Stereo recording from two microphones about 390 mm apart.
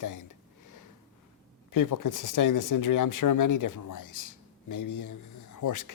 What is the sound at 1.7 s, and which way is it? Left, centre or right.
Speech, left.